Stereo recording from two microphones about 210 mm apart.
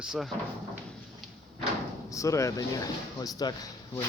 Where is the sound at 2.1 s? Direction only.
15° left (ahead or behind).